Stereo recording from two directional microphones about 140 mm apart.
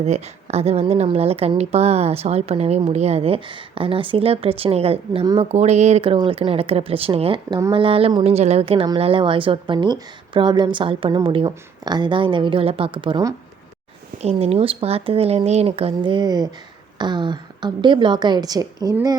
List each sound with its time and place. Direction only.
0.0 s a woman's voice: 50° right (ahead or behind)
14.2 s a woman's voice: 45° right (ahead or behind); by 18.9 s 25° right (ahead or behind)